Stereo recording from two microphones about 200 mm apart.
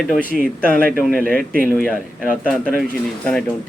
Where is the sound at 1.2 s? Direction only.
45° right (ahead or behind).